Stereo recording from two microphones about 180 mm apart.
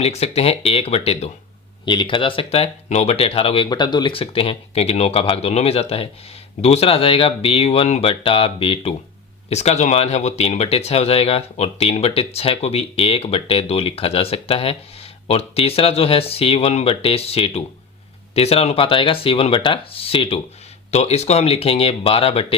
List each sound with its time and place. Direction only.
0.0 s speech: 35° left (ahead or behind)